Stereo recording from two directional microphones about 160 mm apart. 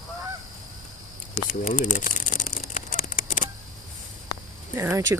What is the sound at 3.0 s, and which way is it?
Honk, 55° left (ahead or behind).